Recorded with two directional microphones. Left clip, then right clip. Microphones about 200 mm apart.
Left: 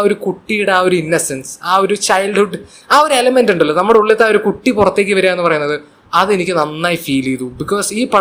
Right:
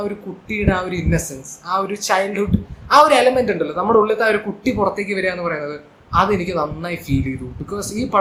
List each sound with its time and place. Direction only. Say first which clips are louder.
0.0 s speech: left 12 dB; 45° left (ahead or behind)